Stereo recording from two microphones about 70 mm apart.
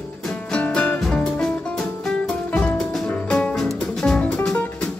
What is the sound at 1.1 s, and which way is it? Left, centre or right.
Music, centre.